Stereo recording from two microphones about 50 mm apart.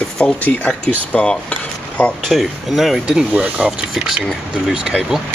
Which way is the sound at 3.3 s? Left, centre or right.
Right.